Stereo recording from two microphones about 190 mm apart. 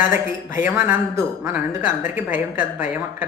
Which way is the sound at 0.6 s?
10° right (ahead or behind).